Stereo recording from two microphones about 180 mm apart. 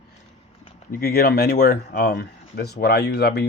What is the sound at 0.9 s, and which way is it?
Speech, 55° left (ahead or behind).